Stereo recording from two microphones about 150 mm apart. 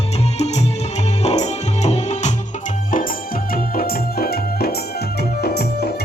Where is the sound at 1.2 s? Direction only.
45° left (ahead or behind).